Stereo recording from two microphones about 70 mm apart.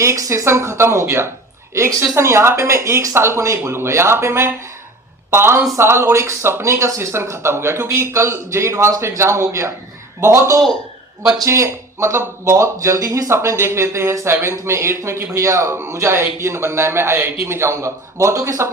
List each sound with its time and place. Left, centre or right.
0.0 s speech: right
13.3 s speech: right